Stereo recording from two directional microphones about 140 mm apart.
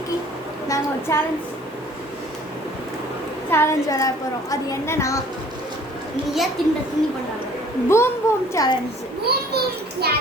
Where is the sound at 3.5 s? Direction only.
20° left (ahead or behind).